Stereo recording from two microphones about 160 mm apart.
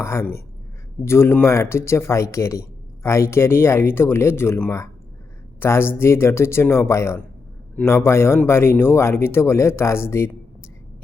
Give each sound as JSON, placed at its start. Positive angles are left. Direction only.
{"t": 0.0, "sound": "speech", "side_deg": 15}